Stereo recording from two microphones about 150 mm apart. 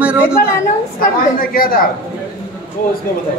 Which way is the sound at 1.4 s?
75° left (ahead or behind).